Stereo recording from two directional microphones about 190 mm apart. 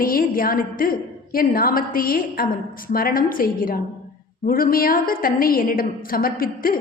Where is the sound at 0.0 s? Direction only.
50° left (ahead or behind).